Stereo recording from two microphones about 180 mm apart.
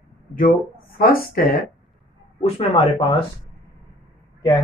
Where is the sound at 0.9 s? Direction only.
55° left (ahead or behind).